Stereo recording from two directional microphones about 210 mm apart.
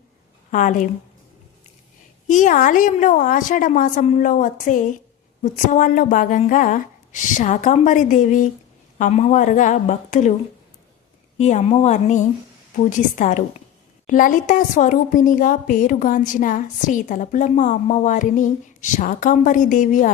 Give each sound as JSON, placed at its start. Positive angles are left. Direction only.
{"t": 0.5, "sound": "speech", "side_deg": 40}
{"t": 2.2, "sound": "speech", "side_deg": 35}
{"t": 11.3, "sound": "speech", "side_deg": 35}